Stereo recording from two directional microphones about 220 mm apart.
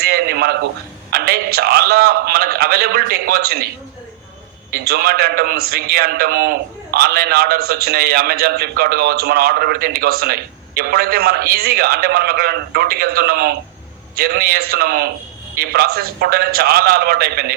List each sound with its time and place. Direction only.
0.0 s a sound: 45° right (ahead or behind)
1.1 s a man's voice: 45° right (ahead or behind)
4.7 s a man's voice: 45° right (ahead or behind)